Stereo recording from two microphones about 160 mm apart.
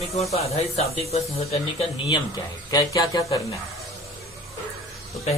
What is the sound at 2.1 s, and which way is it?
Speech, 25° left (ahead or behind).